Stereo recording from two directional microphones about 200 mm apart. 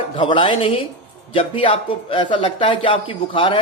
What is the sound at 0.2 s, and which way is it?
Speech, 25° left (ahead or behind).